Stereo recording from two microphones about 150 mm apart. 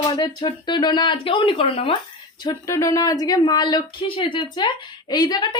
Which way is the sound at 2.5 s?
20° left (ahead or behind).